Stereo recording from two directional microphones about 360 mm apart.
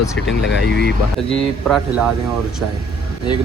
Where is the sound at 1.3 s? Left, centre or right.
Centre.